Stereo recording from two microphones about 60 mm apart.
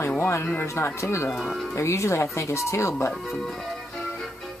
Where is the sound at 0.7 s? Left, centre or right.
Left.